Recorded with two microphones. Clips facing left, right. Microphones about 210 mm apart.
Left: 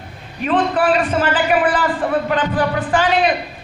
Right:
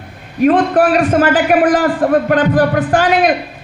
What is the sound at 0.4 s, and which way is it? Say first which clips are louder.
A man's voice: right 6 dB; 45° right (ahead or behind).